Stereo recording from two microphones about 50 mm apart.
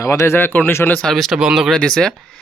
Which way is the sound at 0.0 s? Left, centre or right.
Left.